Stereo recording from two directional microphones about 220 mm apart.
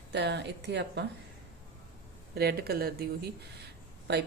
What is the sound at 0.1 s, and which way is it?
Speech, 50° right (ahead or behind).